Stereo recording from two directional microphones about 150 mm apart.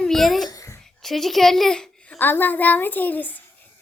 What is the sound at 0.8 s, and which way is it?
A child's voice, centre (ahead or behind).